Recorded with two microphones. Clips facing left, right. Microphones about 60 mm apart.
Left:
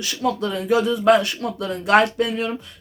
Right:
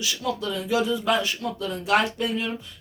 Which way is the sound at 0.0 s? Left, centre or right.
Left.